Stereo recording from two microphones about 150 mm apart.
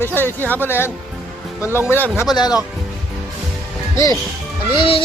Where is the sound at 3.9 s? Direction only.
25° left (ahead or behind).